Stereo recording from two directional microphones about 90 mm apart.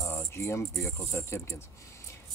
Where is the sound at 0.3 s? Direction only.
30° left (ahead or behind).